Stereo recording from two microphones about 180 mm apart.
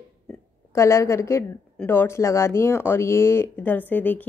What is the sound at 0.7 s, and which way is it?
Speech, 15° left (ahead or behind).